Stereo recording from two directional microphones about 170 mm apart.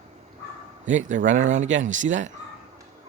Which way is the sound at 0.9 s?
45° right (ahead or behind).